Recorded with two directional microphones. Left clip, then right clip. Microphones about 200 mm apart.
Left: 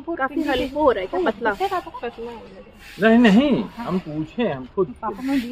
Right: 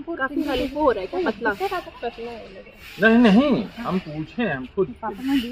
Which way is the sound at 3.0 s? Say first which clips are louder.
Left 1 dB; 15° left (ahead or behind).